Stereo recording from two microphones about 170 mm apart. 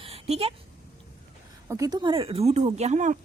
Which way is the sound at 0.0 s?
35° right (ahead or behind).